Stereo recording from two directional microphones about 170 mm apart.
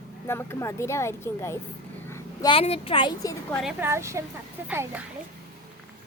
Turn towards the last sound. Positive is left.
turn(degrees=-10)  # may be behind; listen again after turning